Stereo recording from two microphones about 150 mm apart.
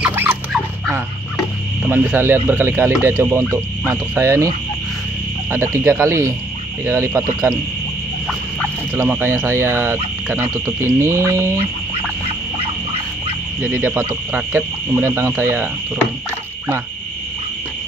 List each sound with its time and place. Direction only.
0.0 s dog: 15° right (ahead or behind)
1.9 s speech: 15° right (ahead or behind)
5.9 s speech: 15° right (ahead or behind)
8.9 s speech: 15° right (ahead or behind)
11.0 s mantra: 20° right (ahead or behind)
13.6 s speech: 15° right (ahead or behind)